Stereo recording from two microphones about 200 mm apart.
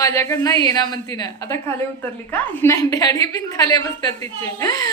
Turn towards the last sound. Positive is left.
turn(degrees=20)  # may be behind; listen again after turning